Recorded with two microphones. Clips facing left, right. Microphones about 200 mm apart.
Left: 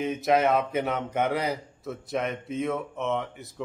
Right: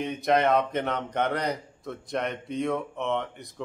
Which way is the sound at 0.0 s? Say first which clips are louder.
Left 1 dB; centre (ahead or behind).